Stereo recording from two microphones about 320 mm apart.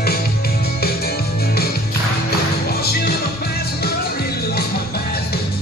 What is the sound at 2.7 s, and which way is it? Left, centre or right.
Music, left.